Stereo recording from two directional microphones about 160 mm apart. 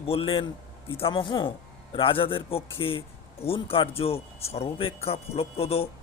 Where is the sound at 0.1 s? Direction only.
35° left (ahead or behind).